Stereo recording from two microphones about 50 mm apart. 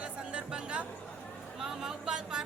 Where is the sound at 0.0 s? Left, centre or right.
Right.